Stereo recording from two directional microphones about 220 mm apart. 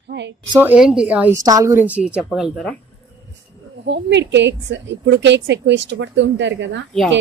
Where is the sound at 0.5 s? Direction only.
5° right (ahead or behind).